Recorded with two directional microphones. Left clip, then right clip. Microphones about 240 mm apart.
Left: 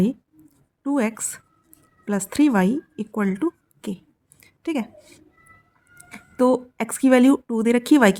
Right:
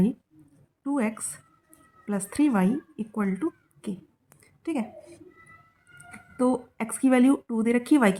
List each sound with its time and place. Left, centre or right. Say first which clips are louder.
0.8 s a woman's voice: left 5 dB; left
4.4 s a sound: left 4 dB; left
6.1 s speech: left 7 dB; left